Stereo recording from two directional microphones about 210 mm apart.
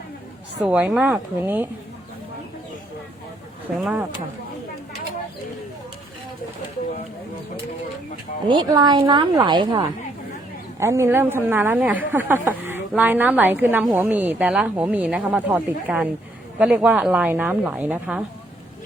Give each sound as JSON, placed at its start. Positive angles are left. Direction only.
{"t": 0.6, "sound": "a woman's voice", "side_deg": -5}
{"t": 3.8, "sound": "a woman's voice", "side_deg": -5}
{"t": 8.4, "sound": "a woman's voice", "side_deg": -20}